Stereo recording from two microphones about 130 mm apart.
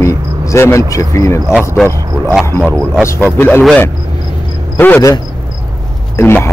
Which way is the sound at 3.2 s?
15° left (ahead or behind).